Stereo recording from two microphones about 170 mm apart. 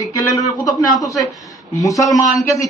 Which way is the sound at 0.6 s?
Centre (ahead or behind).